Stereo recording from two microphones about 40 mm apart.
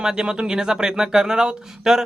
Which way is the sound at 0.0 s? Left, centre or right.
Centre.